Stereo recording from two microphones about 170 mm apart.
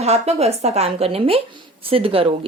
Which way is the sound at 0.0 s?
40° right (ahead or behind).